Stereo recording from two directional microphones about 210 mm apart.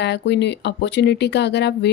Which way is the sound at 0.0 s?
55° left (ahead or behind).